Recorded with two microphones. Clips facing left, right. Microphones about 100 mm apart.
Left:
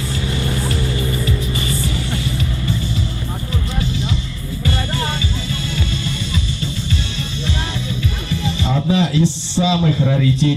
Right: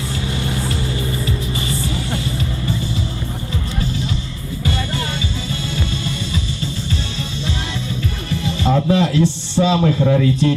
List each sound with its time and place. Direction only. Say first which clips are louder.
1.5 s music: even; 25° right (ahead or behind)
8.6 s a man's voice: right 3 dB; 50° right (ahead or behind)